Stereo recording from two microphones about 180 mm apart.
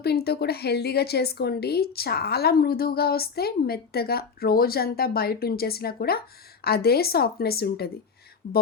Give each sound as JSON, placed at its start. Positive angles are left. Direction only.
{"t": 0.0, "sound": "a woman's voice", "side_deg": 60}
{"t": 8.4, "sound": "speech", "side_deg": 50}